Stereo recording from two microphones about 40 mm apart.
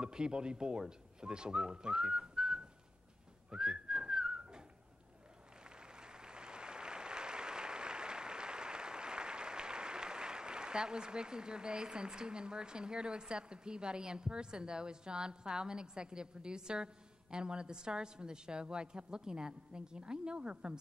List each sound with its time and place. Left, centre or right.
0.0 s speech: right
3.4 s whistling: centre
5.6 s applause: right